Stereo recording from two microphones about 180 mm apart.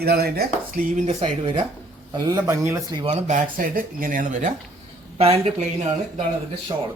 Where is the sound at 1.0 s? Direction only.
30° right (ahead or behind).